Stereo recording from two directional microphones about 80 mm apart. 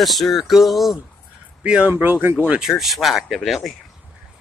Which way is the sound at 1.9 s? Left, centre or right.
Right.